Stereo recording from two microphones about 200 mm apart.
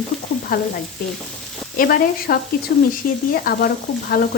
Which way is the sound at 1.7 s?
45° left (ahead or behind).